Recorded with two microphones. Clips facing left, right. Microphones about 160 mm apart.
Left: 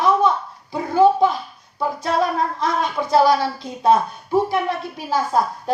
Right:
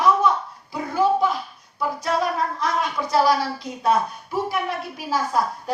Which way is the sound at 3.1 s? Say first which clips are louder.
Left 4 dB; 25° left (ahead or behind).